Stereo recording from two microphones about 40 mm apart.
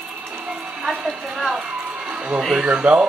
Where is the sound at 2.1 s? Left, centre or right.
Right.